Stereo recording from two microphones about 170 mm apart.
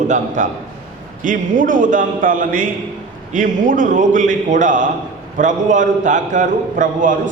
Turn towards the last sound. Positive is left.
turn(degrees=-50)  # may be behind; listen again after turning